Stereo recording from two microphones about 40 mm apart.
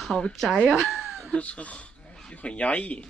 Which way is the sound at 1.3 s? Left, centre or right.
Left.